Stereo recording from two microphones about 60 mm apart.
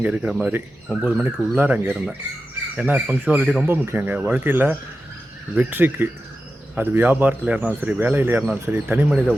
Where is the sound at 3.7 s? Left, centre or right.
Right.